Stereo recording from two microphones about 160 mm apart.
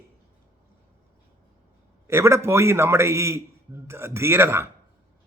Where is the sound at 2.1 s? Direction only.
15° right (ahead or behind).